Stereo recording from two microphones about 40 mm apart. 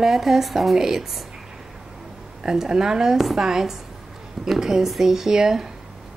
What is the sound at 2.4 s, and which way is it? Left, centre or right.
Speech, centre.